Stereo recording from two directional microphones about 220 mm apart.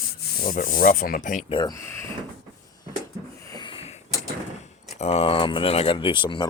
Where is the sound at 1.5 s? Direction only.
15° left (ahead or behind).